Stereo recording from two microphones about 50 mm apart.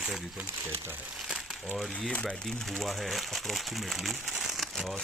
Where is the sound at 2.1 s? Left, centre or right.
Left.